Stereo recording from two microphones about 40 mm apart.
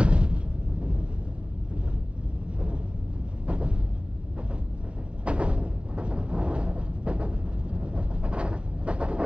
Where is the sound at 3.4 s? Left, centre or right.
Right.